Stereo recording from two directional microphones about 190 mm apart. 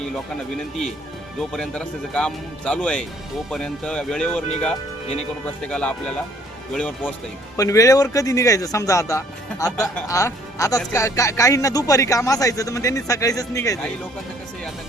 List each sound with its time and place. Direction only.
1.4 s speech: 5° left (ahead or behind)
5.6 s speech: 5° left (ahead or behind)
7.5 s speech: 15° left (ahead or behind)